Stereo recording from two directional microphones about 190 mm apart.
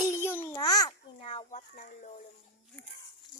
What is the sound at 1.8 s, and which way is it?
Speech, 40° left (ahead or behind).